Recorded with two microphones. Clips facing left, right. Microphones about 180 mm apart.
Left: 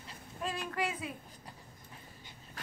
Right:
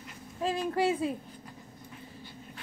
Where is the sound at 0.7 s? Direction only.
30° right (ahead or behind).